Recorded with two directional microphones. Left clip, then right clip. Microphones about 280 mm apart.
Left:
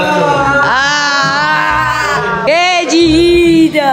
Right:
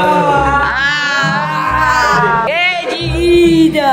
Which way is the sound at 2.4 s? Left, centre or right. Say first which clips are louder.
Left 4 dB; centre.